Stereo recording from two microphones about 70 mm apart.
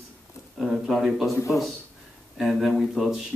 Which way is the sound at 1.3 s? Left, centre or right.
Left.